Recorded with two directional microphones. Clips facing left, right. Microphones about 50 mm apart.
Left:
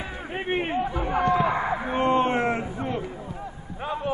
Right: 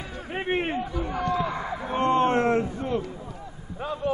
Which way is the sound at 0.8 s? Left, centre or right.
Left.